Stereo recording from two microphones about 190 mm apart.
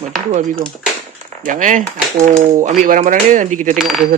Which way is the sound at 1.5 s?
40° right (ahead or behind).